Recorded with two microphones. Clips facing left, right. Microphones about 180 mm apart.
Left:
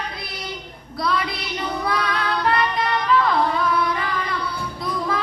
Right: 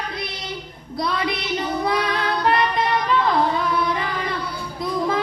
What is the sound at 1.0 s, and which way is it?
Child singing, 25° right (ahead or behind).